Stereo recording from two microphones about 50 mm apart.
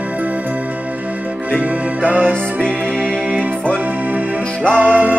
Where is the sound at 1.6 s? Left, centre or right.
Right.